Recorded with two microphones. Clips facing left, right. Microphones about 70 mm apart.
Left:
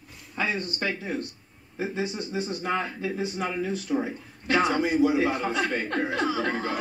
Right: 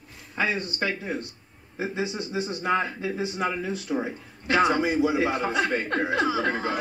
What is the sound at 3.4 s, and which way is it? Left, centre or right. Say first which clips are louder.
Speech: right 1 dB; right.